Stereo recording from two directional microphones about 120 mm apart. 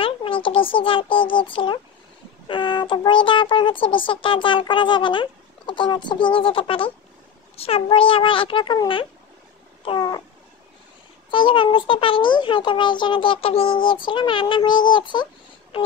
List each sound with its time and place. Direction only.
0.0 s a child's voice: 50° left (ahead or behind)
9.8 s cat: 35° left (ahead or behind)
11.2 s speech: 45° left (ahead or behind)